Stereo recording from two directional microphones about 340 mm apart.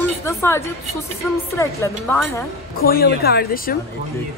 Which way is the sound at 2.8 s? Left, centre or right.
Left.